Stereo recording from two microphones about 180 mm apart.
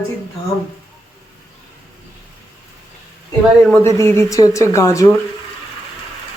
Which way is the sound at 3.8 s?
15° left (ahead or behind).